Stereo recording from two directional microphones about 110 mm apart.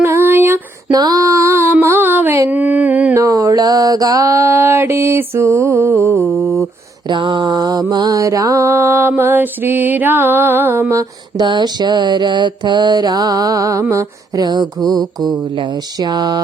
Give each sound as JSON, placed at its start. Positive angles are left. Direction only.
{"t": 0.0, "sound": "female singing", "side_deg": -20}
{"t": 0.9, "sound": "a sound", "side_deg": -35}
{"t": 3.2, "sound": "music", "side_deg": -30}
{"t": 6.2, "sound": "mantra", "side_deg": 0}
{"t": 7.1, "sound": "mantra", "side_deg": -45}
{"t": 11.3, "sound": "mantra", "side_deg": -40}
{"t": 14.4, "sound": "mantra", "side_deg": -40}